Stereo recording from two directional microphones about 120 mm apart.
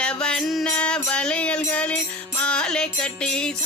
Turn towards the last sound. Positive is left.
turn(degrees=5)  # may be behind; listen again after turning